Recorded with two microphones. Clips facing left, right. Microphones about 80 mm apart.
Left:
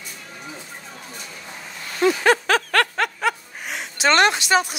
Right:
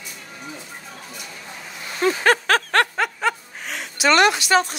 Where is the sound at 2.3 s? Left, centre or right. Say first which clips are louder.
Right 2 dB; right.